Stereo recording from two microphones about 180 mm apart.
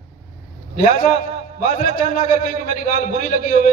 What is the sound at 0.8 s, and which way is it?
A man's voice, 40° left (ahead or behind).